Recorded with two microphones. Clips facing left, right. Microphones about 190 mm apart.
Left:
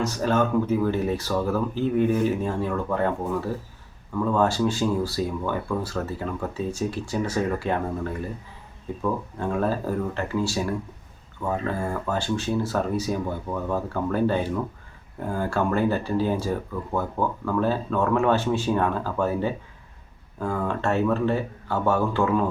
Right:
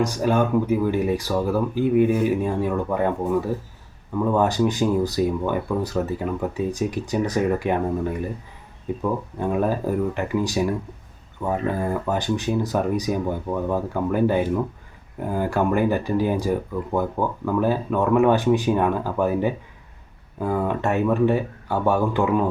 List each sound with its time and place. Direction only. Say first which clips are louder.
0.0 s speech: right 2 dB; 15° right (ahead or behind)